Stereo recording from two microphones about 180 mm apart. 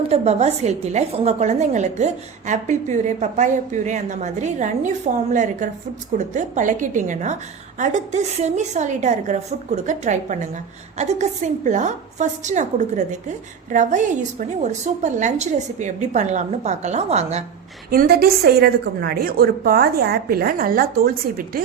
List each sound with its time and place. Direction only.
0.1 s a woman's voice: 35° right (ahead or behind)
17.9 s a woman's voice: 60° right (ahead or behind)